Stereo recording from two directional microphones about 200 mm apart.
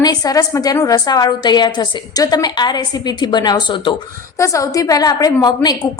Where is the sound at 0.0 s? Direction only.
20° left (ahead or behind).